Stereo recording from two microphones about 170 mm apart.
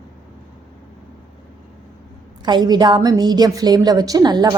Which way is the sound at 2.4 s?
25° right (ahead or behind).